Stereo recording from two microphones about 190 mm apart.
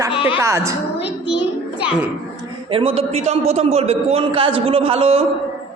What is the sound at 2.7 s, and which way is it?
A man's voice, 30° right (ahead or behind).